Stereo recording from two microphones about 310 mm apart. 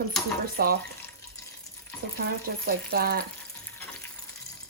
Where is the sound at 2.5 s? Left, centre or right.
Right.